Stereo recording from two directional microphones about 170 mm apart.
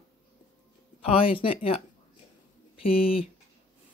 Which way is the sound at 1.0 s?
35° left (ahead or behind).